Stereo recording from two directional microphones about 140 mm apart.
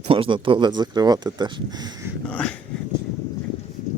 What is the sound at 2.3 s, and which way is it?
Dog, 10° left (ahead or behind).